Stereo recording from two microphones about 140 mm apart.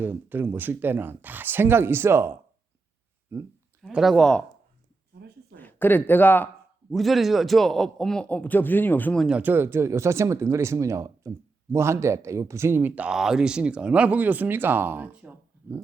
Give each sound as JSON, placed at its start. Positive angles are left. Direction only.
{"t": 0.0, "sound": "speech", "side_deg": -15}
{"t": 3.8, "sound": "a man's voice", "side_deg": 0}
{"t": 5.5, "sound": "speech", "side_deg": 15}
{"t": 6.9, "sound": "a man's voice", "side_deg": 0}
{"t": 9.2, "sound": "speech", "side_deg": -10}